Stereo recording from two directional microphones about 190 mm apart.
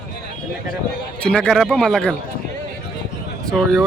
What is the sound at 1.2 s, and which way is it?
Speech, 5° left (ahead or behind).